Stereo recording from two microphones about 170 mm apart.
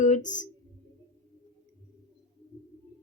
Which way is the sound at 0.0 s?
45° left (ahead or behind).